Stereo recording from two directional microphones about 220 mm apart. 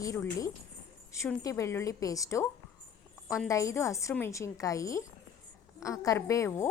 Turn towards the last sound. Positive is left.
turn(degrees=15)  # may be behind; listen again after turning